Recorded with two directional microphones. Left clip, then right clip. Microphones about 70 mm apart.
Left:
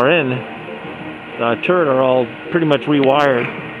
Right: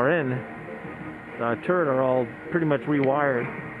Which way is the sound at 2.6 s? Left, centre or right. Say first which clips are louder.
Left 10 dB; left.